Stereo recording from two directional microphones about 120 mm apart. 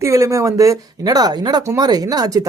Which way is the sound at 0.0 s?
25° right (ahead or behind).